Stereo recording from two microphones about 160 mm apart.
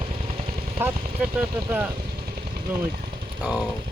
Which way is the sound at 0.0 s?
40° right (ahead or behind).